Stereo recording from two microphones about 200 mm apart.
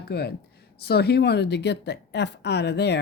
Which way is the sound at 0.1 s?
55° left (ahead or behind).